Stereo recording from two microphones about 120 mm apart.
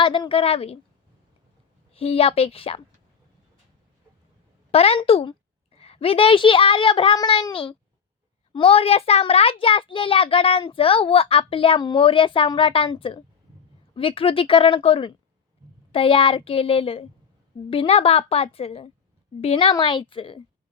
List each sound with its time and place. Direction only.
0.0 s a child's voice: 45° left (ahead or behind)
1.9 s a child's voice: 55° left (ahead or behind)
4.7 s a woman's voice: 55° left (ahead or behind)
19.7 s a child's voice: 45° left (ahead or behind)